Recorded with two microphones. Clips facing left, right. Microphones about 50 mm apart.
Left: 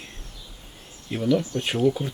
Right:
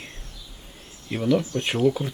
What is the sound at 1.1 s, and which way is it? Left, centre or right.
Speech, centre.